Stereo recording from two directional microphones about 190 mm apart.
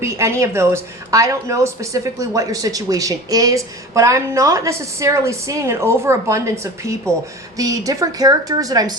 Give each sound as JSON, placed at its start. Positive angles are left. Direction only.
{"t": 0.0, "sound": "a woman's voice", "side_deg": -15}